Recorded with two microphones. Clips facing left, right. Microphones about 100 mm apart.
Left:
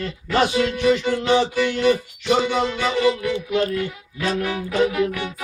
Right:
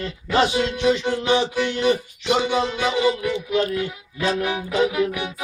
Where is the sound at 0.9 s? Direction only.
20° right (ahead or behind).